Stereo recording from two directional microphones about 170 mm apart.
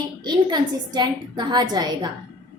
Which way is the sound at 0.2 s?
25° right (ahead or behind).